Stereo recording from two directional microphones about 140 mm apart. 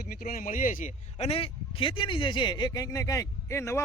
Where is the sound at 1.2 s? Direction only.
45° left (ahead or behind).